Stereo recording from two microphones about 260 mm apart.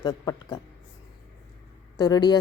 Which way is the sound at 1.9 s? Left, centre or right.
Centre.